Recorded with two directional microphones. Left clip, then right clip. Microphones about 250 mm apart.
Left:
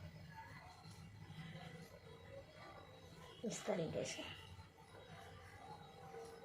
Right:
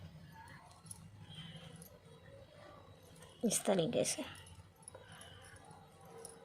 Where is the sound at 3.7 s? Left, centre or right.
Right.